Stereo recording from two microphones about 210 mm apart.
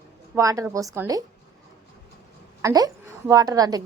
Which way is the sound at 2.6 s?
15° right (ahead or behind).